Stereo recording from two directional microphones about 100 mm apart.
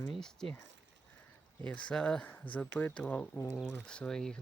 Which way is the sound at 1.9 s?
10° left (ahead or behind).